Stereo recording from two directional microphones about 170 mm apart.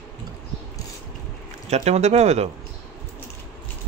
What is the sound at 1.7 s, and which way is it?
Speech, 40° right (ahead or behind).